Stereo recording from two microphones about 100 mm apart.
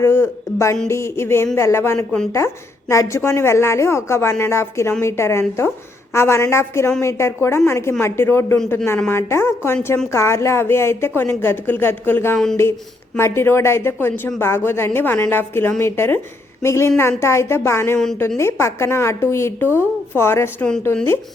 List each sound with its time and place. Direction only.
0.0 s a woman's voice: 25° left (ahead or behind)
17.9 s a woman's voice: 5° left (ahead or behind)
18.3 s a woman's voice: 25° left (ahead or behind)